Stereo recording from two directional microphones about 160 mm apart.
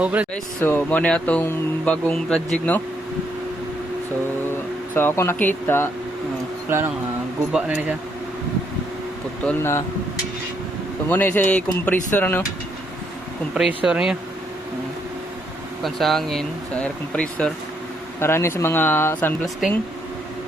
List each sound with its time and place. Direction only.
0.0 s speech: 10° right (ahead or behind)
0.6 s speech: 10° left (ahead or behind)
4.9 s speech: 15° left (ahead or behind)
6.7 s speech: 15° right (ahead or behind)
9.5 s speech: 15° left (ahead or behind)
11.1 s speech: 10° left (ahead or behind)
13.5 s speech: 5° right (ahead or behind)
15.8 s speech: centre (ahead or behind)